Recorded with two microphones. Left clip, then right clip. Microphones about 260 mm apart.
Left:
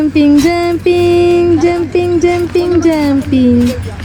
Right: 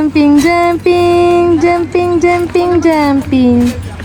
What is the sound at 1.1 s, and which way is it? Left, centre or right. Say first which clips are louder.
Music: right 1 dB; right.